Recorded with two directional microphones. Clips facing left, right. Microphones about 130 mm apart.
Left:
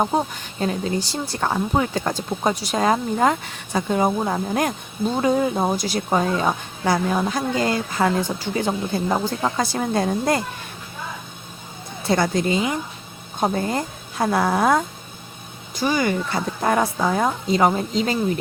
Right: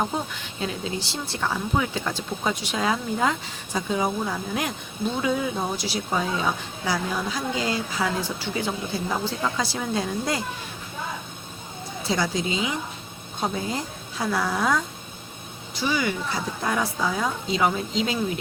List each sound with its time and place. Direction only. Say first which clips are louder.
0.1 s a woman's voice: left 7 dB; 35° left (ahead or behind); by 10.4 s 50° left (ahead or behind)
12.0 s a woman's voice: left 6 dB; 55° left (ahead or behind)